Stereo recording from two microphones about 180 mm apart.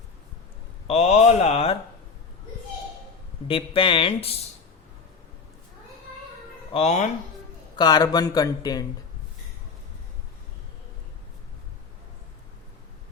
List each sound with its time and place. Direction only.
0.9 s speech: 35° left (ahead or behind)
3.4 s speech: 30° left (ahead or behind)
6.7 s speech: 40° left (ahead or behind)
7.8 s speech: 20° left (ahead or behind)